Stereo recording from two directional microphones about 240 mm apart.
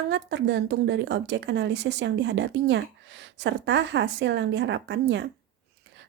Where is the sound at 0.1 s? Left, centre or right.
Right.